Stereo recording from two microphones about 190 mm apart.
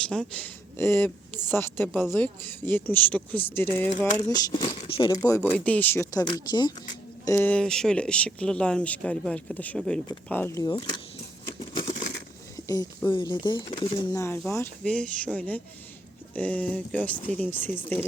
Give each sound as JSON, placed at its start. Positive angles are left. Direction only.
{"t": 0.0, "sound": "speech", "side_deg": 5}
{"t": 7.3, "sound": "speech", "side_deg": 10}
{"t": 12.6, "sound": "speech", "side_deg": 20}
{"t": 14.1, "sound": "speech", "side_deg": 15}